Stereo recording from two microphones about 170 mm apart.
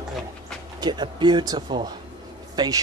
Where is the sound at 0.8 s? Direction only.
25° right (ahead or behind).